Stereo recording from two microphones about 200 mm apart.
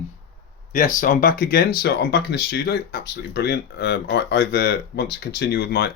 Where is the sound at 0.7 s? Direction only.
40° left (ahead or behind).